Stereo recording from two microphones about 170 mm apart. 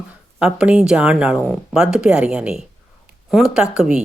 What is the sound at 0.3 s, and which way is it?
A woman's voice, 5° right (ahead or behind).